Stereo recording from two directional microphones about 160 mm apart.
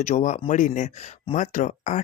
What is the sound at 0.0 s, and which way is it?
Speech, 50° left (ahead or behind).